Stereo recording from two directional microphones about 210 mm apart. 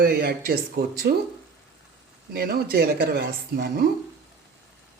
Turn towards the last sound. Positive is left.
turn(degrees=-50)  # may be behind; listen again after turning